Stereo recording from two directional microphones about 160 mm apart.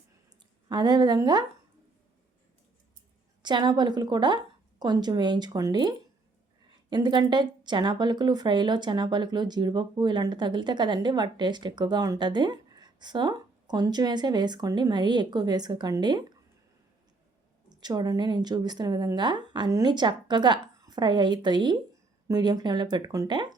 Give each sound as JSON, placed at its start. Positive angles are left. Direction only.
{"t": 0.7, "sound": "speech", "side_deg": -25}
{"t": 3.4, "sound": "speech", "side_deg": -25}
{"t": 6.9, "sound": "speech", "side_deg": -25}
{"t": 17.7, "sound": "speech", "side_deg": -25}